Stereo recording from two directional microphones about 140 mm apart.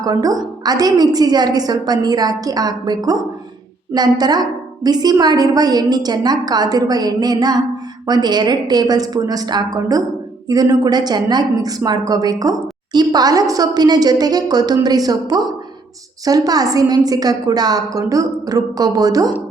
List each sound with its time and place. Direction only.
0.0 s a woman's voice: 25° right (ahead or behind)